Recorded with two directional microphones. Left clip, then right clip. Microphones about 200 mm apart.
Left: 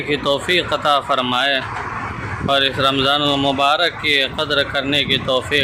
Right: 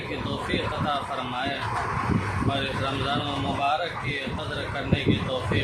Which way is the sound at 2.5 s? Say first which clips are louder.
Left 15 dB; 45° left (ahead or behind).